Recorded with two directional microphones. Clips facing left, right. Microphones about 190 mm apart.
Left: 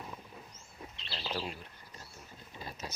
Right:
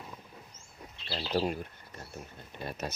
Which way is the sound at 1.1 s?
45° right (ahead or behind).